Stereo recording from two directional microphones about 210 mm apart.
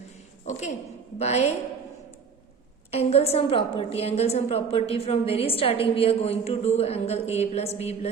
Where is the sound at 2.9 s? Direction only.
30° left (ahead or behind).